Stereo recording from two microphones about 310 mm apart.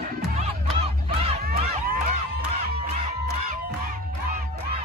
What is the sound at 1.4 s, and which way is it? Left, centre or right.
Crowd, right.